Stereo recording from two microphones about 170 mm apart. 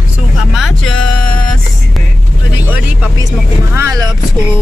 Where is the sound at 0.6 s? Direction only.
Centre (ahead or behind).